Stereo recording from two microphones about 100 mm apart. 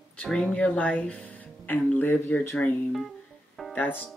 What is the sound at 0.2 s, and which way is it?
Speech, 5° left (ahead or behind).